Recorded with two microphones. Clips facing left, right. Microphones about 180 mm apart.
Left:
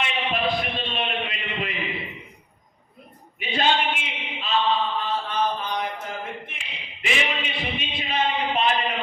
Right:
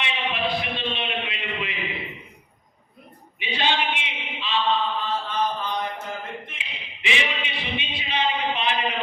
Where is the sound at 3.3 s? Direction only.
45° left (ahead or behind).